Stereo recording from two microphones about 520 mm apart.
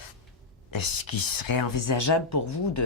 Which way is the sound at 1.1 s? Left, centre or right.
Left.